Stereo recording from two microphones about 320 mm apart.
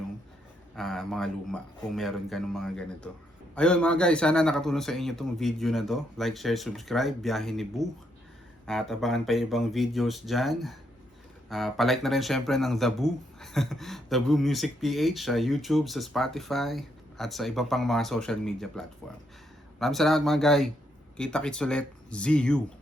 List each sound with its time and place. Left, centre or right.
0.8 s speech: centre